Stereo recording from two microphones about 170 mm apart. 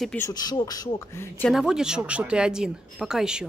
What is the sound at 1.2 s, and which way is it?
Speech, 10° left (ahead or behind).